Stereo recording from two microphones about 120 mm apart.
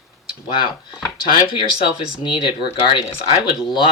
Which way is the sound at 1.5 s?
40° left (ahead or behind).